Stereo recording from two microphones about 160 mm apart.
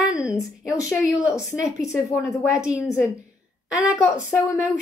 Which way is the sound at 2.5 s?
5° right (ahead or behind).